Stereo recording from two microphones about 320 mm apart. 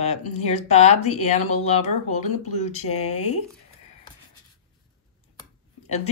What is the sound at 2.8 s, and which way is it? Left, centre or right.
Speech, left.